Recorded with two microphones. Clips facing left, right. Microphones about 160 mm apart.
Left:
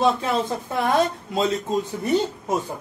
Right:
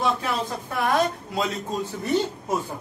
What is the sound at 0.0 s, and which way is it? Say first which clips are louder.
Speech: left 4 dB; 25° left (ahead or behind).